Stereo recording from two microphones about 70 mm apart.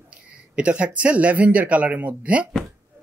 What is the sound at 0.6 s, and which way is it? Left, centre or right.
Speech, centre.